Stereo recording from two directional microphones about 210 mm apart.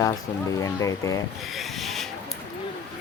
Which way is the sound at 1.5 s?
Centre (ahead or behind).